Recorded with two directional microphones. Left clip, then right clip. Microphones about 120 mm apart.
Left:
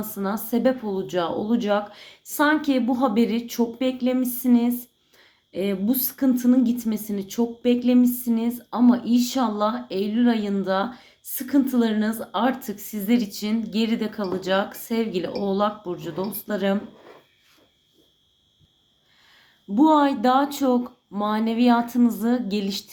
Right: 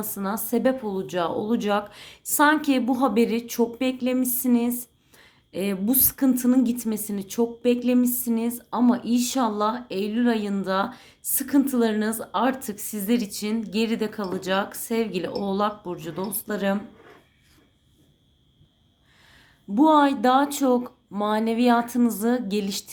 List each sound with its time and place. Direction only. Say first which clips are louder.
0.0 s a woman's voice: left 1 dB; 35° right (ahead or behind)
19.7 s a woman's voice: even; 35° right (ahead or behind)